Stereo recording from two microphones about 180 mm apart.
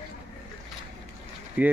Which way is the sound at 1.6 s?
10° right (ahead or behind).